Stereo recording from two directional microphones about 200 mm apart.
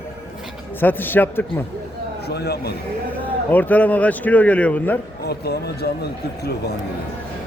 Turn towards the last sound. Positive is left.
turn(degrees=55)  # may be behind; listen again after turning